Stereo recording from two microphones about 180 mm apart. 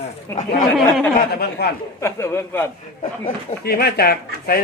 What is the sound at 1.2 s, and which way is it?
Speech, 60° left (ahead or behind).